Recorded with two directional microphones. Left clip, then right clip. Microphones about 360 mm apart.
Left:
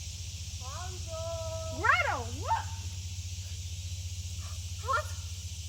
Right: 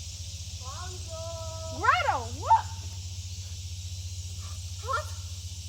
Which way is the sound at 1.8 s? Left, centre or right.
Centre.